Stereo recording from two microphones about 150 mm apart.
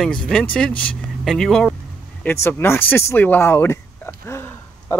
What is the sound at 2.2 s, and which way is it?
Speech, 15° left (ahead or behind).